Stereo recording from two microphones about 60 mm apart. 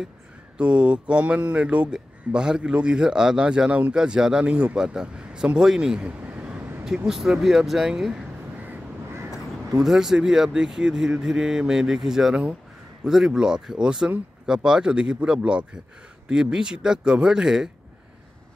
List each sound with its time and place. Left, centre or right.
0.6 s speech: centre
6.8 s speech: centre
9.8 s speech: centre